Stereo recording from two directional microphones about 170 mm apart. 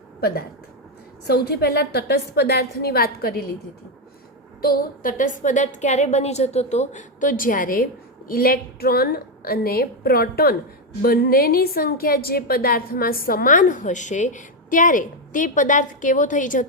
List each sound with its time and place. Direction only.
0.2 s a woman's voice: 65° left (ahead or behind)
4.6 s a woman's voice: 55° left (ahead or behind)